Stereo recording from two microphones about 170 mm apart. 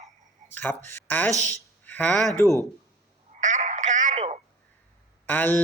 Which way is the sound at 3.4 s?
45° right (ahead or behind).